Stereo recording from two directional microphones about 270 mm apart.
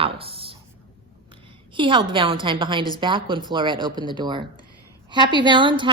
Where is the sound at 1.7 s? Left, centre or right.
Centre.